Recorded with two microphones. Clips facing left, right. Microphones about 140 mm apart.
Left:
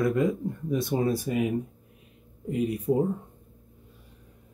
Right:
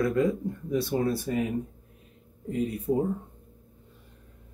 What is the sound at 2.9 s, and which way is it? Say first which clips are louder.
Speech: left 2 dB; 25° left (ahead or behind).